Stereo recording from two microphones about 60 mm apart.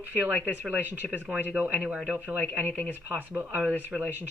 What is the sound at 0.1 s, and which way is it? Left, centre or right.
Speech, right.